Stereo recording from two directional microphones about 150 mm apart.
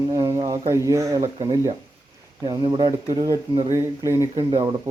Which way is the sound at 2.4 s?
30° right (ahead or behind).